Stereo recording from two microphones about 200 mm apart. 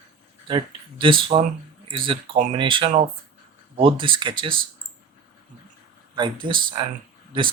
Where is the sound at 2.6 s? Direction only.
25° right (ahead or behind).